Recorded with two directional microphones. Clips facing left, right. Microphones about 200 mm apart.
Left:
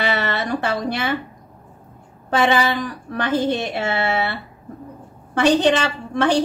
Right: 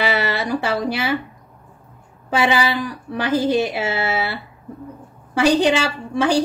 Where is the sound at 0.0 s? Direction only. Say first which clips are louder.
Right 1 dB; 10° right (ahead or behind).